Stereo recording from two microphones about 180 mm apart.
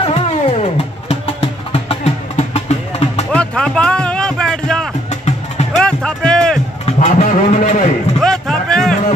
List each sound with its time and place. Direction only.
0.0 s music: 35° left (ahead or behind)
1.7 s music: 35° left (ahead or behind)
3.3 s music: 5° left (ahead or behind)
5.1 s music: 40° left (ahead or behind)
5.8 s music: 5° left (ahead or behind)
6.9 s a man's voice: 40° left (ahead or behind)
8.2 s music: 5° left (ahead or behind)